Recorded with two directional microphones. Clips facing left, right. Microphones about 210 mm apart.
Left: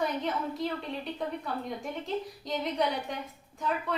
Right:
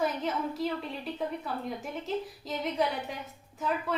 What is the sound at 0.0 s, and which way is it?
A woman's voice, centre (ahead or behind).